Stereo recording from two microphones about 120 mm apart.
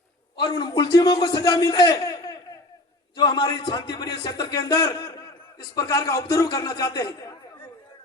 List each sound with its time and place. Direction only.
0.3 s a man's voice: 35° left (ahead or behind)